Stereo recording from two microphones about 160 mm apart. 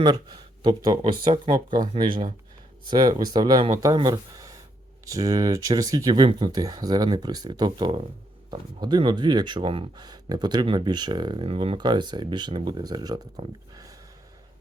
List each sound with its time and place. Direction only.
0.0 s speech: 30° right (ahead or behind)
1.7 s speech: 55° right (ahead or behind)
2.0 s speech: 30° right (ahead or behind)